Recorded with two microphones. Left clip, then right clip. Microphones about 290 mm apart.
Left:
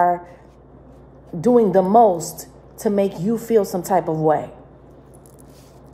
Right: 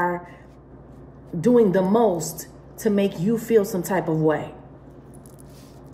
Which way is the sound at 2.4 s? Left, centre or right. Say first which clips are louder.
Left 2 dB; centre.